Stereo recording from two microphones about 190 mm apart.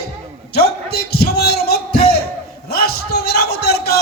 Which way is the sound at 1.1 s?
55° left (ahead or behind).